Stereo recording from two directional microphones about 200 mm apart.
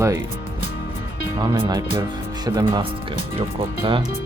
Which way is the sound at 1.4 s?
25° right (ahead or behind).